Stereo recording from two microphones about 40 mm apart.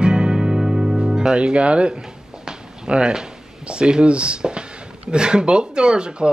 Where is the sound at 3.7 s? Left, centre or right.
Right.